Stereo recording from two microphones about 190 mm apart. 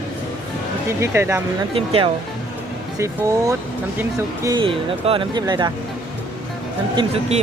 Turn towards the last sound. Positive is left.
turn(degrees=-30)  # may be behind; listen again after turning